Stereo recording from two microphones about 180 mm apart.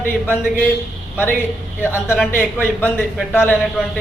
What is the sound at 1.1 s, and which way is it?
A man's voice, 10° left (ahead or behind).